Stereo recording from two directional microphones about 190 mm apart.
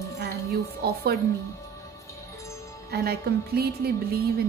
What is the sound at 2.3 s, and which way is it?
Music, 15° left (ahead or behind).